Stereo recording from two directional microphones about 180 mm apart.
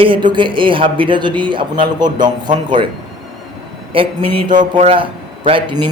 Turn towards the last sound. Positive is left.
turn(degrees=-25)  # may be behind; listen again after turning